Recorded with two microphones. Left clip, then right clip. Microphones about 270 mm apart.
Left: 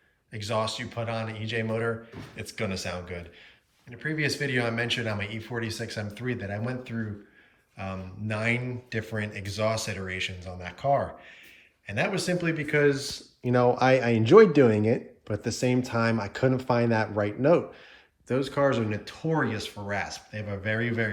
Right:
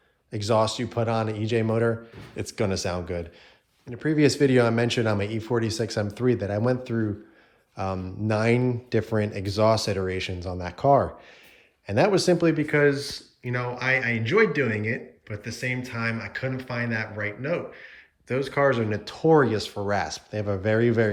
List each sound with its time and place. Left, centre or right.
0.3 s speech: centre
14.8 s speech: left
15.4 s speech: centre